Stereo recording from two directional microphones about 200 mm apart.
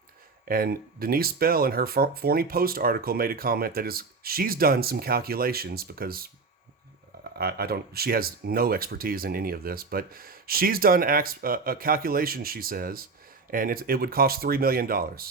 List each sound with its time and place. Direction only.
0.4 s speech: 45° right (ahead or behind)
7.3 s speech: 50° right (ahead or behind)